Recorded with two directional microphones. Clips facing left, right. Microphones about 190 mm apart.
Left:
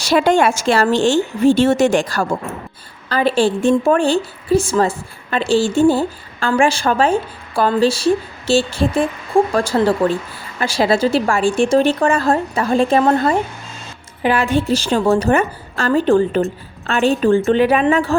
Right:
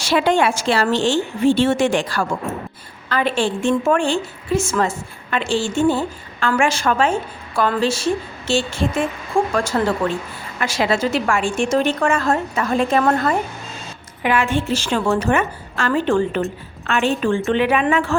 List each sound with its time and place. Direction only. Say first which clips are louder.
0.0 s a woman's voice: left 3 dB; 40° left (ahead or behind)